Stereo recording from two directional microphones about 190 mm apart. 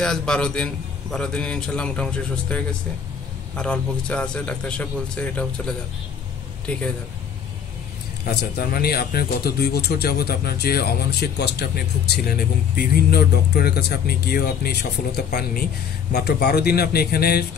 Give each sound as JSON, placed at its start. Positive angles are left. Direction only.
{"t": 0.0, "sound": "a man's voice", "side_deg": 5}
{"t": 8.3, "sound": "speech", "side_deg": 55}